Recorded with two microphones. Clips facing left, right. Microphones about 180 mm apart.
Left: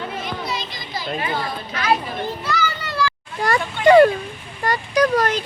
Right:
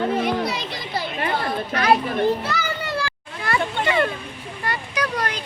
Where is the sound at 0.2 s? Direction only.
65° right (ahead or behind).